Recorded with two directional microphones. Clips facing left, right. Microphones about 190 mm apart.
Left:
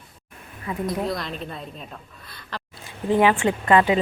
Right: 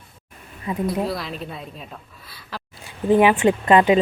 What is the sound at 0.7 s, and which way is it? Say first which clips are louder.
Speech: right 3 dB; 20° right (ahead or behind).